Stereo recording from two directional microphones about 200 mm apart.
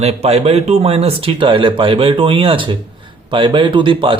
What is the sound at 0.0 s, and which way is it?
A man's voice, 30° right (ahead or behind).